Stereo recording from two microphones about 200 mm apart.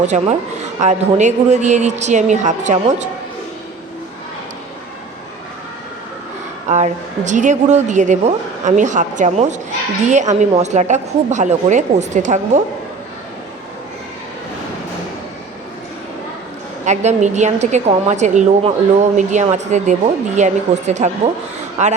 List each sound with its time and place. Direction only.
0.0 s a woman's voice: 35° right (ahead or behind)
6.7 s a woman's voice: 35° right (ahead or behind)
16.8 s a woman's voice: 35° right (ahead or behind)